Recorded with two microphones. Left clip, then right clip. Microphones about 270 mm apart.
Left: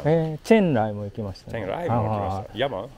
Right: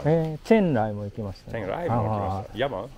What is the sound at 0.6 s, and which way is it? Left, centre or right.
Speech, left.